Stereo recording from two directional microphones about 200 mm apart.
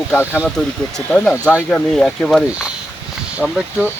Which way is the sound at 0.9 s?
5° left (ahead or behind).